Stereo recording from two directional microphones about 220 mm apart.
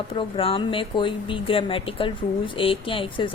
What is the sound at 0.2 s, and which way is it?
A woman's voice, 25° left (ahead or behind).